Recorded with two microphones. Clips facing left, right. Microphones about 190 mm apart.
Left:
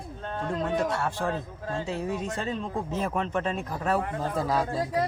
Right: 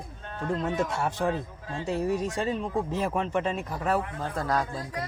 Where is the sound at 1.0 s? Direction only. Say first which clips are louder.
Right 2 dB; 20° right (ahead or behind).